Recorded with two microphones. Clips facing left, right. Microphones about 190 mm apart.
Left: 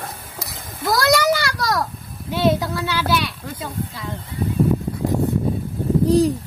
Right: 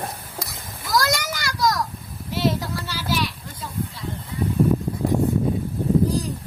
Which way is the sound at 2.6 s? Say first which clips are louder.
Left 6 dB; 70° left (ahead or behind).